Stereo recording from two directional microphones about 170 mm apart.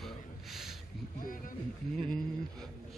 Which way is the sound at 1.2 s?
55° left (ahead or behind).